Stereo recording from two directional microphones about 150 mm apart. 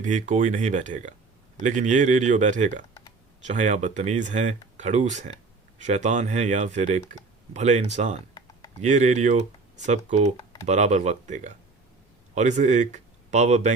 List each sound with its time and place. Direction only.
0.0 s speech: 55° right (ahead or behind)